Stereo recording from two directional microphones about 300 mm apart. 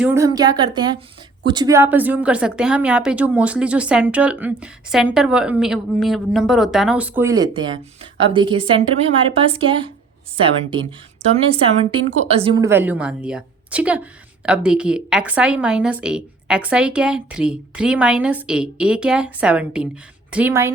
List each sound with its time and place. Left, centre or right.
0.0 s a woman's voice: centre
11.2 s a woman's voice: centre